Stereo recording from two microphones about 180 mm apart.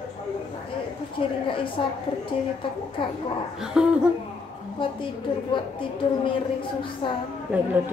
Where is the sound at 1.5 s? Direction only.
30° left (ahead or behind).